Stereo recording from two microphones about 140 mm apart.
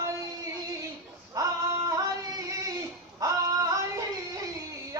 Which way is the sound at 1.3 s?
25° right (ahead or behind).